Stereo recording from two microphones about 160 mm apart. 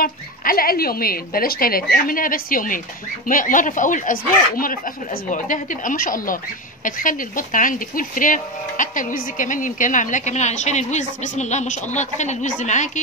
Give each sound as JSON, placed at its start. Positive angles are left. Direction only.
{"t": 0.0, "sound": "a woman's voice", "side_deg": 65}